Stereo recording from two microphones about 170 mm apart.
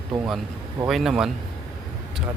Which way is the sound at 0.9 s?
Centre (ahead or behind).